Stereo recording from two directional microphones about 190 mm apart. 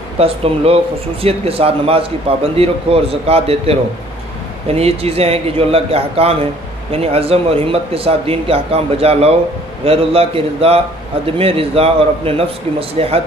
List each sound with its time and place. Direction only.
0.2 s a man's voice: 30° right (ahead or behind)